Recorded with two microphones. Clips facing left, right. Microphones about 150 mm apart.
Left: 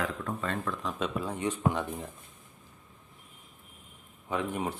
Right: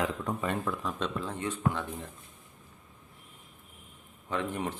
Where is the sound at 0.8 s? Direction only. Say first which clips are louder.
Left 1 dB; 10° left (ahead or behind).